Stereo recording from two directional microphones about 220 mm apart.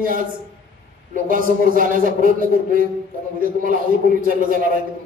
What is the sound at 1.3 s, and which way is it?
Speech, 40° right (ahead or behind).